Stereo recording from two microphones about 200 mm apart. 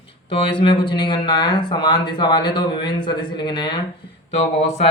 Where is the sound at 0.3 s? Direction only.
25° left (ahead or behind).